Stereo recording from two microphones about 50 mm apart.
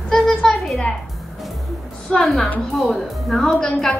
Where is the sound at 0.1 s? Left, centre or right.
Centre.